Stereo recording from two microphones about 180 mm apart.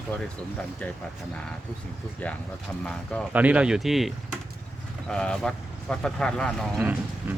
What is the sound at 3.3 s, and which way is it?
Speech, 10° right (ahead or behind).